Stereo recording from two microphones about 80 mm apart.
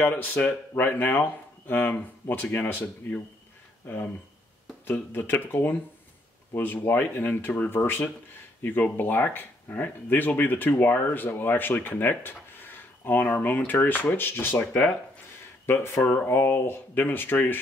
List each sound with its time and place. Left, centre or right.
0.0 s speech: left